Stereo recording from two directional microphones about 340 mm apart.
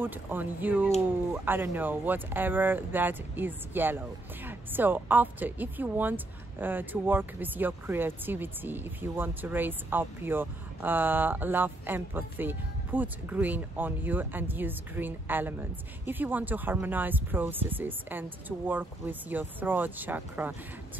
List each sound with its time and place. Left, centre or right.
0.0 s a woman's voice: centre